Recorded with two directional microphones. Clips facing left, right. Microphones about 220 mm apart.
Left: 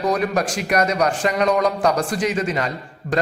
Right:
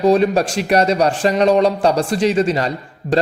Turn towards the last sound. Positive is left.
turn(degrees=-30)  # may be behind; listen again after turning